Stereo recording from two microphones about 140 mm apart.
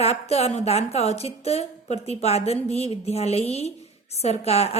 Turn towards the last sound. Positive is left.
turn(degrees=50)  # may be behind; listen again after turning